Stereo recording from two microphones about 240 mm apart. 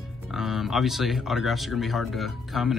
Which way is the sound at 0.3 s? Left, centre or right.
Centre.